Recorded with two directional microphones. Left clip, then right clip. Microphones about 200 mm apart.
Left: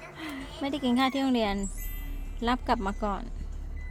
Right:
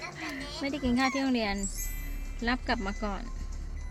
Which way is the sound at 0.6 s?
20° left (ahead or behind).